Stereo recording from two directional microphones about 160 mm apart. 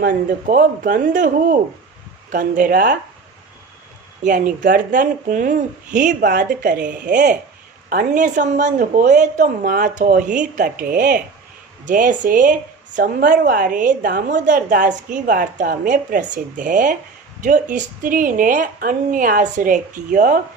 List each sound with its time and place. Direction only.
0.5 s a woman's voice: 55° right (ahead or behind)
4.2 s a woman's voice: 60° right (ahead or behind)